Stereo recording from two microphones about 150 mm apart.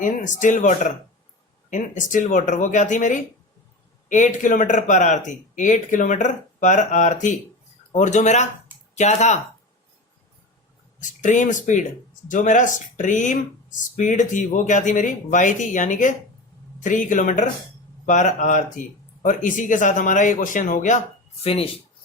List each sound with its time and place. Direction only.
0.0 s speech: 55° left (ahead or behind)
11.0 s speech: 55° left (ahead or behind)
21.4 s speech: 40° left (ahead or behind)